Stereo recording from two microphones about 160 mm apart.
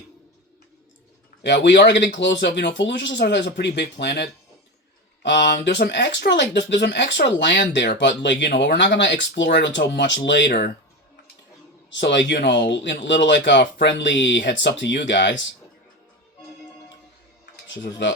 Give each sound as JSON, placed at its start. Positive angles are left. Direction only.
{"t": 1.4, "sound": "speech", "side_deg": 90}
{"t": 11.9, "sound": "speech", "side_deg": 90}